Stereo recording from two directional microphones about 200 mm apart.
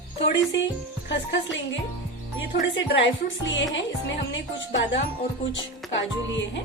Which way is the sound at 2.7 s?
65° left (ahead or behind).